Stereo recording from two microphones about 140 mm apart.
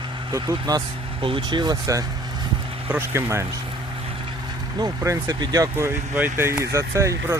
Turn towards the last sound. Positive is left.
turn(degrees=-20)  # may be behind; listen again after turning